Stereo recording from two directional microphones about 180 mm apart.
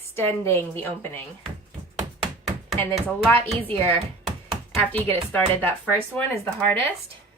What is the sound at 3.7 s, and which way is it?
Speech, 30° right (ahead or behind).